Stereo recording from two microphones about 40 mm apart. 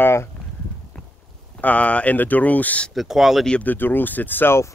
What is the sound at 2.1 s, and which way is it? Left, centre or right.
Speech, left.